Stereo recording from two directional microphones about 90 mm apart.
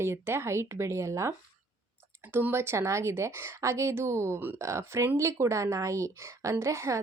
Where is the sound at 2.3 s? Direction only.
25° right (ahead or behind).